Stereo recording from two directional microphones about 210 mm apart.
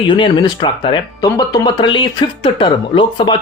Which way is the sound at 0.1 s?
20° left (ahead or behind).